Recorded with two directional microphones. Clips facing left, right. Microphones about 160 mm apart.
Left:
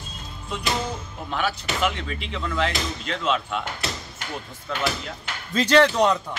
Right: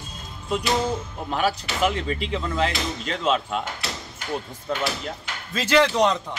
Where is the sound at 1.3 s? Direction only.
40° right (ahead or behind).